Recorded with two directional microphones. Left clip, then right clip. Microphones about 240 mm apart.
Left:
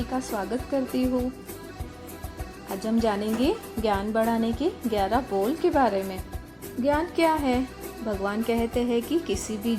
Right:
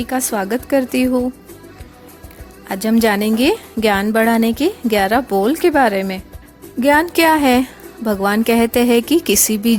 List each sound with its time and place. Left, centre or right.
0.1 s a woman's voice: right
2.6 s a woman's voice: right